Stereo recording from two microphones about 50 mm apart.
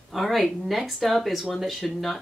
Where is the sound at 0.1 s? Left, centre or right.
Centre.